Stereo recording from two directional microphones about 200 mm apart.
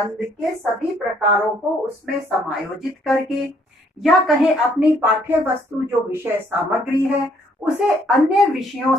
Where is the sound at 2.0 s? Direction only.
Centre (ahead or behind).